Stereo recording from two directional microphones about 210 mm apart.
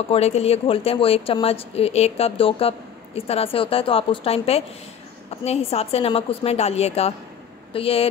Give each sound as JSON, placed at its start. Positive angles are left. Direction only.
{"t": 0.1, "sound": "speech", "side_deg": 30}